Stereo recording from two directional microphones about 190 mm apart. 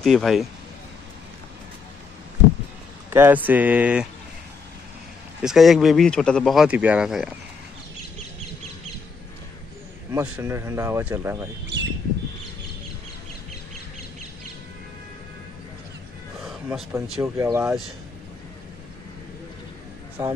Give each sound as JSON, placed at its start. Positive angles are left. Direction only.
{"t": 0.0, "sound": "speech", "side_deg": 0}
{"t": 3.1, "sound": "speech", "side_deg": -10}
{"t": 5.4, "sound": "speech", "side_deg": 0}
{"t": 10.1, "sound": "speech", "side_deg": -15}
{"t": 11.6, "sound": "bird", "side_deg": -65}
{"t": 16.4, "sound": "a sound", "side_deg": 0}
{"t": 17.2, "sound": "speech", "side_deg": -15}
{"t": 20.2, "sound": "speech", "side_deg": -15}